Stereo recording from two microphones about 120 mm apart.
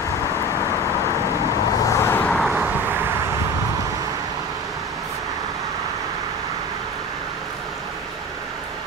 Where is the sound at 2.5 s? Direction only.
15° right (ahead or behind).